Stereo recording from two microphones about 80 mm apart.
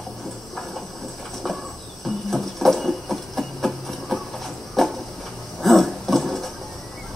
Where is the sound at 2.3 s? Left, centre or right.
Centre.